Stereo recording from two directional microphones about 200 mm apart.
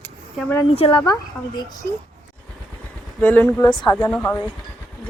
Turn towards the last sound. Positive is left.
turn(degrees=10)  # may be behind; listen again after turning